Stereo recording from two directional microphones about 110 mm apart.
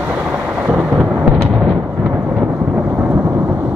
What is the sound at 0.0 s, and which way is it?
Thunder, 15° right (ahead or behind).